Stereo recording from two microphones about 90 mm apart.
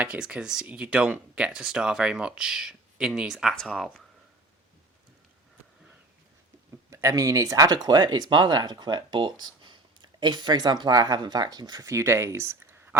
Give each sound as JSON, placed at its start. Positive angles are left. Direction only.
{"t": 0.0, "sound": "speech", "side_deg": -10}
{"t": 3.5, "sound": "speech", "side_deg": 5}
{"t": 6.9, "sound": "speech", "side_deg": -35}
{"t": 11.9, "sound": "speech", "side_deg": -30}